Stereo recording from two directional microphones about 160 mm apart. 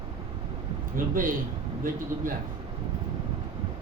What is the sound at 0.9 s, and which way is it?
Speech, 60° right (ahead or behind).